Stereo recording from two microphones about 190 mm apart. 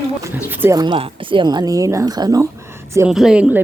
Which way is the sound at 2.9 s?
5° right (ahead or behind).